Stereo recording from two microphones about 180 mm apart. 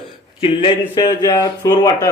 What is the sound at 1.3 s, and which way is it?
Speech, 20° left (ahead or behind).